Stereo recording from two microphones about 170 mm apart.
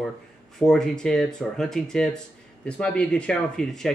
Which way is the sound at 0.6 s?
5° left (ahead or behind).